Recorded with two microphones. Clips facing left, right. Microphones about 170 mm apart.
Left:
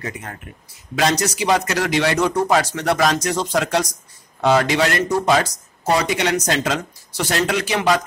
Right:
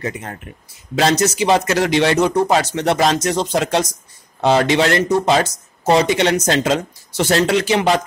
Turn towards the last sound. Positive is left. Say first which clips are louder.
# right 3 dB
turn(degrees=-25)  # may be behind; listen again after turning